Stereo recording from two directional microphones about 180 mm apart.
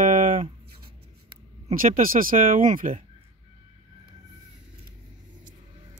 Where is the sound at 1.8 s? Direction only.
50° right (ahead or behind).